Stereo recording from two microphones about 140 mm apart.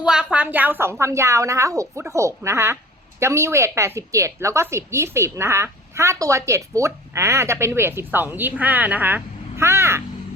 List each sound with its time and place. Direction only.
0.0 s a woman's voice: 5° right (ahead or behind)